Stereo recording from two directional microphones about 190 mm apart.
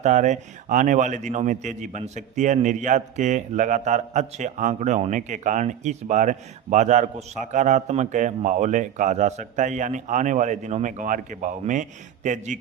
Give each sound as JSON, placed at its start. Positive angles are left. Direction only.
{"t": 0.0, "sound": "a man's voice", "side_deg": -40}